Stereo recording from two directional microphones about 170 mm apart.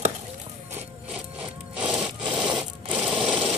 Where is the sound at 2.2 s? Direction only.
5° right (ahead or behind).